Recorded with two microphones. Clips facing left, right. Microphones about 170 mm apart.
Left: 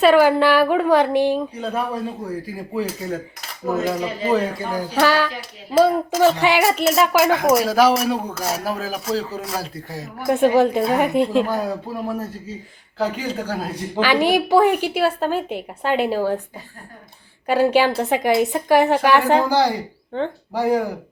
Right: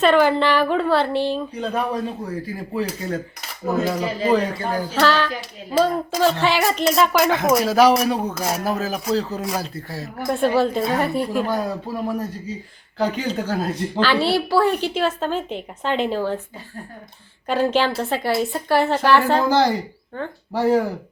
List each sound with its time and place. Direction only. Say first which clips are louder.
0.0 s speech: left 2 dB; 10° left (ahead or behind)
4.3 s speech: right 1 dB; 10° left (ahead or behind); by 8.4 s 10° right (ahead or behind)
8.5 s speech: right 2 dB; 10° left (ahead or behind)
11.5 s speech: even; 5° left (ahead or behind)
17.4 s speech: left 3 dB; 10° left (ahead or behind)